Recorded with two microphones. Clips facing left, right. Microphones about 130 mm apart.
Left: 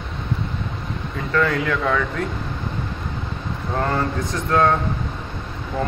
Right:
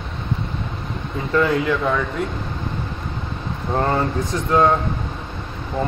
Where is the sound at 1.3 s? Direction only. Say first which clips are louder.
Right 2 dB; 20° right (ahead or behind).